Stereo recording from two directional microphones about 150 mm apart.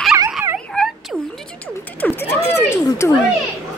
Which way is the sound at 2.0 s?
15° left (ahead or behind).